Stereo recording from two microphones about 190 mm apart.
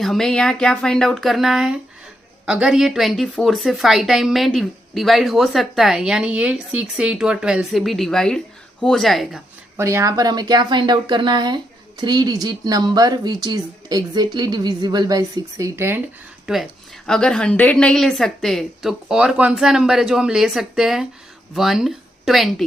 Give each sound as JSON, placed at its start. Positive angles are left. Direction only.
{"t": 0.0, "sound": "speech", "side_deg": 0}
{"t": 9.7, "sound": "speech", "side_deg": -15}